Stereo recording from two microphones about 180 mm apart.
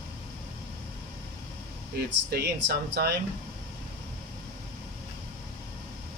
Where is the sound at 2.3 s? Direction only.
60° right (ahead or behind).